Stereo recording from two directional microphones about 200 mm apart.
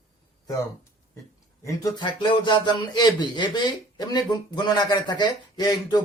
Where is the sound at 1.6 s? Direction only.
20° left (ahead or behind).